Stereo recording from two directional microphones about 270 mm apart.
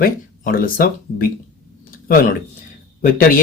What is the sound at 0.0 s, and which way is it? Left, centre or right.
Speech, left.